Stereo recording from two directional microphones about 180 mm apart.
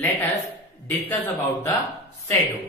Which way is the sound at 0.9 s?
10° left (ahead or behind).